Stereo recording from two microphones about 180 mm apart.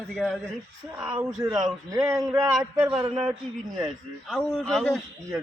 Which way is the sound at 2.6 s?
Centre (ahead or behind).